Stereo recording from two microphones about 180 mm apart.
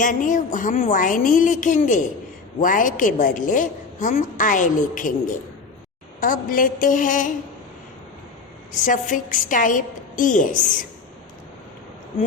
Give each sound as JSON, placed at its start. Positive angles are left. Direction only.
{"t": 0.0, "sound": "a woman's voice", "side_deg": 45}
{"t": 6.2, "sound": "a woman's voice", "side_deg": 50}
{"t": 8.8, "sound": "a woman's voice", "side_deg": 45}